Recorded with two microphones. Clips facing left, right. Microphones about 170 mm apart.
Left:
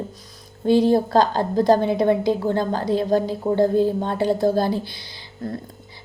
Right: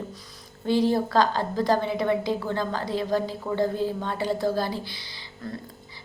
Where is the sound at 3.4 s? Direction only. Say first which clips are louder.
Left 8 dB; 30° left (ahead or behind).